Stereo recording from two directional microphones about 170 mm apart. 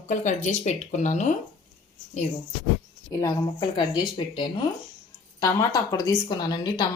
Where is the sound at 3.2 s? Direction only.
25° left (ahead or behind).